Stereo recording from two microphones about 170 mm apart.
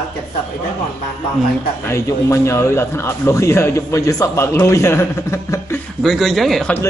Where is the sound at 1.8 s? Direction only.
15° left (ahead or behind).